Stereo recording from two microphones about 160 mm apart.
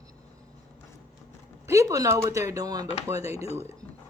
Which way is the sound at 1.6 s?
20° right (ahead or behind).